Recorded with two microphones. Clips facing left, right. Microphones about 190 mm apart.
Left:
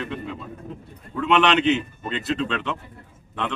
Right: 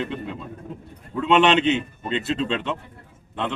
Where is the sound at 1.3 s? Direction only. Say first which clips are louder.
Right 1 dB; 25° right (ahead or behind).